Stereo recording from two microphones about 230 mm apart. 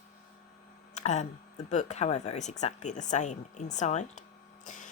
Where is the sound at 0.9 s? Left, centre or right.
Left.